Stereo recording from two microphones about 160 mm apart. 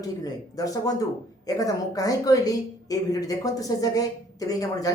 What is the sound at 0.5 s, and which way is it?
A woman's voice, 20° left (ahead or behind).